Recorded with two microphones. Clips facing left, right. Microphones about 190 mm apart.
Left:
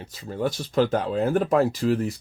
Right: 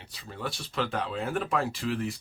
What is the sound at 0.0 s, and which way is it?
Speech, 45° left (ahead or behind).